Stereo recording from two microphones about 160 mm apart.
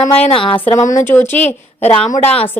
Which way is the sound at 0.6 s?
15° left (ahead or behind).